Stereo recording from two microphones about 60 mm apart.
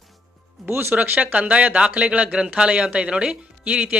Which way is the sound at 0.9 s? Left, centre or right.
Right.